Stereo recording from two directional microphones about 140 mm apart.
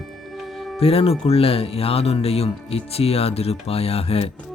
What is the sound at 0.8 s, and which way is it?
Speech, 45° left (ahead or behind).